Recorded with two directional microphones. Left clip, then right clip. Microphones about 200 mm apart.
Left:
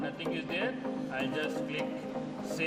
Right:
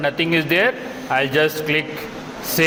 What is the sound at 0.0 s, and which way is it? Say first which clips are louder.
A man's voice: right 17 dB; 55° right (ahead or behind).